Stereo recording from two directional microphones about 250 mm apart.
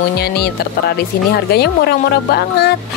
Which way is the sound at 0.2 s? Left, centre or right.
Left.